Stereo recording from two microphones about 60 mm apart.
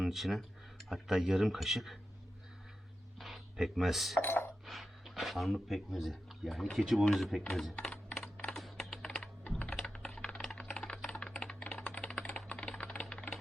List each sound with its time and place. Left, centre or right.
0.0 s speech: centre
3.2 s a sound: centre
4.2 s dishes: left
4.6 s speech: centre
7.8 s computer keyboard: centre
8.5 s typing: centre